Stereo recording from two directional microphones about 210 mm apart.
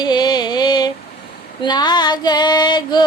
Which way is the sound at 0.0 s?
20° left (ahead or behind).